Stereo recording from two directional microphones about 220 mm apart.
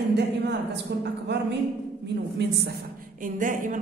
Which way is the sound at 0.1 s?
50° right (ahead or behind).